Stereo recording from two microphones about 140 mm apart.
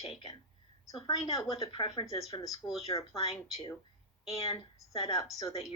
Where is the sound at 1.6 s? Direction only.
35° left (ahead or behind).